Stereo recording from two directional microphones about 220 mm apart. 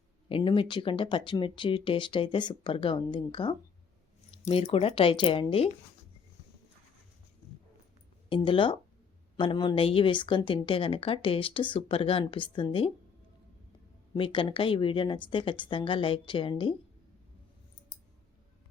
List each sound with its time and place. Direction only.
0.3 s speech: 25° left (ahead or behind)
8.3 s speech: 20° left (ahead or behind)
14.1 s speech: 25° left (ahead or behind)